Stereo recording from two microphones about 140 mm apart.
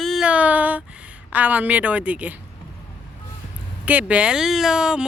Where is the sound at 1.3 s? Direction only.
10° right (ahead or behind).